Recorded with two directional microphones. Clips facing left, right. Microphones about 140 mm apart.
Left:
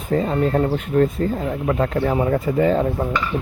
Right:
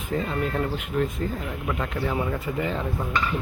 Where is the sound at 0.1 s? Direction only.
35° left (ahead or behind).